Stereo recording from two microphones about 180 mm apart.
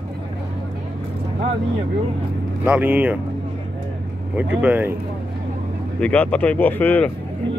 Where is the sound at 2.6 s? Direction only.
10° right (ahead or behind).